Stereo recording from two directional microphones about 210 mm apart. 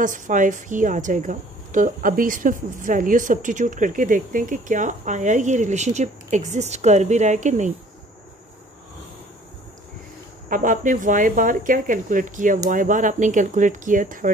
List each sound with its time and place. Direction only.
0.0 s a woman's voice: 40° right (ahead or behind)
10.5 s a woman's voice: 40° right (ahead or behind)